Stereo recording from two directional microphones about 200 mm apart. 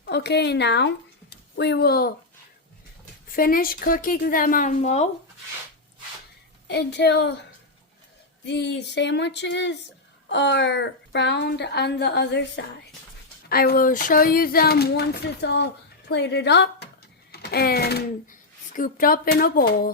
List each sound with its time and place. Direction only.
0.0 s speech: 55° left (ahead or behind)
3.3 s speech: 45° left (ahead or behind)
6.7 s a woman's voice: 55° left (ahead or behind)
8.4 s a woman's voice: 60° left (ahead or behind)